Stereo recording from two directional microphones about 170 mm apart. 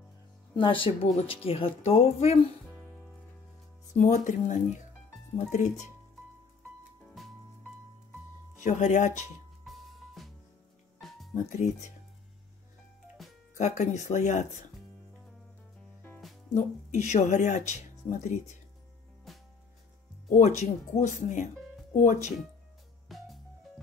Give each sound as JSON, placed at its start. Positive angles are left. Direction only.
{"t": 0.6, "sound": "speech", "side_deg": 30}
{"t": 2.7, "sound": "music", "side_deg": 5}
{"t": 3.9, "sound": "speech", "side_deg": 45}
{"t": 7.1, "sound": "music", "side_deg": 0}
{"t": 8.6, "sound": "speech", "side_deg": 45}
{"t": 9.7, "sound": "music", "side_deg": 0}
{"t": 13.2, "sound": "music", "side_deg": 0}
{"t": 13.6, "sound": "speech", "side_deg": 45}
{"t": 16.5, "sound": "speech", "side_deg": 45}
{"t": 19.3, "sound": "music", "side_deg": 0}
{"t": 20.2, "sound": "speech", "side_deg": 45}
{"t": 23.0, "sound": "music", "side_deg": 0}